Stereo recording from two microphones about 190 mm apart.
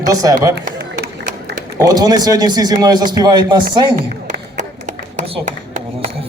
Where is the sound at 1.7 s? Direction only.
20° right (ahead or behind).